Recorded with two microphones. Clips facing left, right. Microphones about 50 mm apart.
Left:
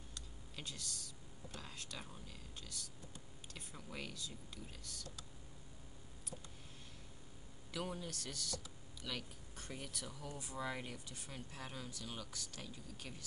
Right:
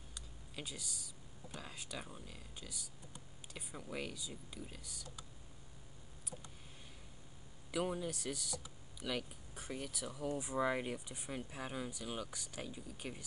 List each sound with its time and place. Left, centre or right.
0.1 s speech: centre
7.7 s speech: centre
10.2 s speech: centre